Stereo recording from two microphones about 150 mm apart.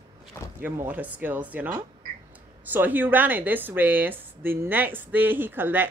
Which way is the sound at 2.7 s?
10° right (ahead or behind).